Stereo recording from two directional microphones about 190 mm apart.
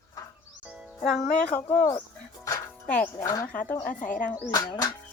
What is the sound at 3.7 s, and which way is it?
Speech, 45° left (ahead or behind).